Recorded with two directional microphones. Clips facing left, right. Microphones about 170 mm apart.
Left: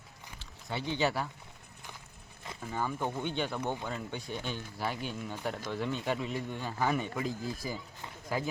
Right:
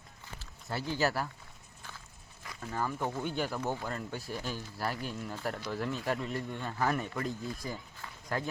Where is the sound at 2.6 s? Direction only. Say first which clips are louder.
Even; centre (ahead or behind).